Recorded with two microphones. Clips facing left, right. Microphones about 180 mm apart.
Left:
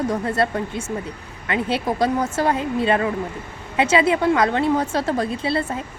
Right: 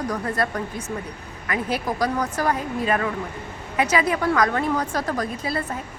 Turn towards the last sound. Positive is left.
turn(degrees=25)  # may be behind; listen again after turning